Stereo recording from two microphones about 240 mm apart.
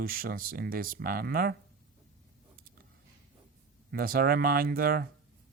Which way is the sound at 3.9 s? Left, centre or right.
Right.